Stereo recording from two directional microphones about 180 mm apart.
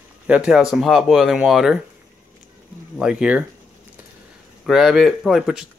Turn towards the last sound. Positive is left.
turn(degrees=-5)  # may be behind; listen again after turning